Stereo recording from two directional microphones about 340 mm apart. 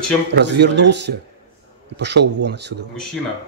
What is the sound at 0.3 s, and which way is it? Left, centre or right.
A man's voice, right.